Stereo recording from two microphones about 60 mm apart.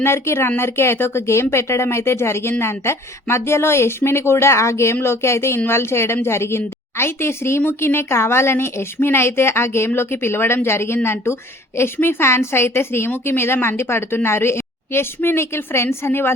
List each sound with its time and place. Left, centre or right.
0.0 s speech: left